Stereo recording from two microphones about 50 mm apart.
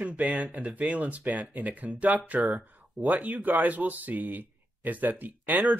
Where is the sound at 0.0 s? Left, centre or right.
Right.